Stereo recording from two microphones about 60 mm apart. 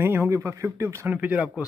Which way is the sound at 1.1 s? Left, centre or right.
Right.